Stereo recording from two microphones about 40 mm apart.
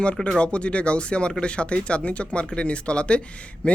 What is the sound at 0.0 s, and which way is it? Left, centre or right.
Speech, left.